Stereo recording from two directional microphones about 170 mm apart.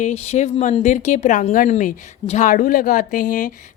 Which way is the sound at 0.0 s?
40° left (ahead or behind).